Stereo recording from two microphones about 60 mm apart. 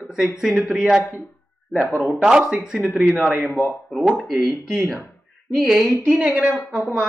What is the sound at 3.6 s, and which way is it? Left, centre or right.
Speech, left.